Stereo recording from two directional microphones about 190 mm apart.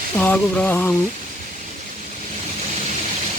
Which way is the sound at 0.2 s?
10° left (ahead or behind).